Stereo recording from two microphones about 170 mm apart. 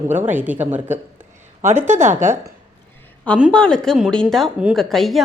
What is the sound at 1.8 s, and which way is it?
Speech, 45° right (ahead or behind).